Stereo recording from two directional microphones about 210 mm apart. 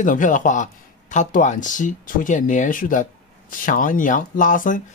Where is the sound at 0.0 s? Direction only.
40° left (ahead or behind).